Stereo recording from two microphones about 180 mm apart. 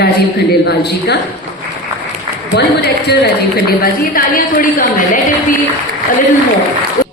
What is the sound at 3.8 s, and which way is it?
A woman's voice, 55° left (ahead or behind).